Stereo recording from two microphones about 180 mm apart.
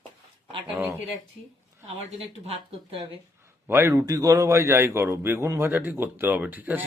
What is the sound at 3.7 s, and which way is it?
A man's voice, 15° right (ahead or behind).